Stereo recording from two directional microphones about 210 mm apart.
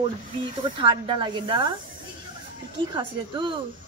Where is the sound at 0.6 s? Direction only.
25° right (ahead or behind).